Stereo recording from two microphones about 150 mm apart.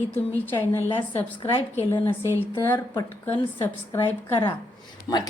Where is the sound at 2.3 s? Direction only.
15° left (ahead or behind).